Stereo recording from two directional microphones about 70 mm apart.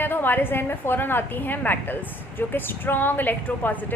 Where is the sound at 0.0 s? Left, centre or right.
Left.